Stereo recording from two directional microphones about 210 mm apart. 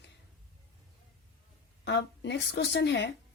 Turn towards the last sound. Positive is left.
turn(degrees=55)  # may be behind; listen again after turning